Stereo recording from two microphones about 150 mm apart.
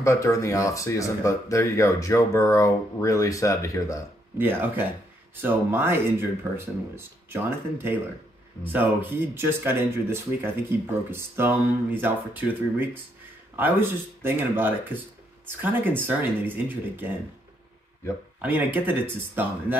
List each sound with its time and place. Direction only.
0.0 s speech: 20° left (ahead or behind)
4.4 s speech: 15° right (ahead or behind)
18.4 s speech: 10° right (ahead or behind)